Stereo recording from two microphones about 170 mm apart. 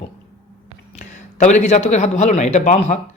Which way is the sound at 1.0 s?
45° left (ahead or behind).